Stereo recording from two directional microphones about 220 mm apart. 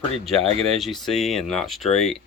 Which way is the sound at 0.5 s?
25° right (ahead or behind).